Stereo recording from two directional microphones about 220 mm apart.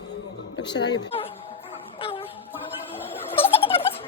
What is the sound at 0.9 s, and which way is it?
Speech, 25° left (ahead or behind).